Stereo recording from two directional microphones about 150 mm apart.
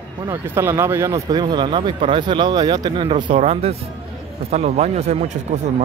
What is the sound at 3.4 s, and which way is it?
Speech, 45° right (ahead or behind).